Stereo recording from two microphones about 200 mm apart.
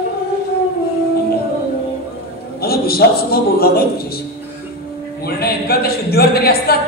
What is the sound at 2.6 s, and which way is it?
A man's voice, 50° left (ahead or behind).